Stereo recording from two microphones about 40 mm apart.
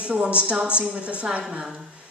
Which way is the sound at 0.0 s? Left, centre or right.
Right.